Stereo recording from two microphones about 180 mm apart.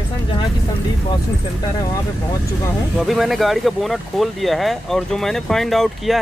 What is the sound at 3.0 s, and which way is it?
Speech, centre (ahead or behind).